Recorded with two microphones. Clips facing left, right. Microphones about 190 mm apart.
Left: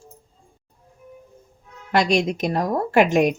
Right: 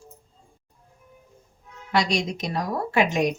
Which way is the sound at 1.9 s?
55° left (ahead or behind).